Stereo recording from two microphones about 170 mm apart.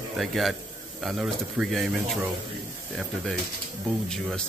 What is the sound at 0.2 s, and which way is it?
Speech, centre (ahead or behind).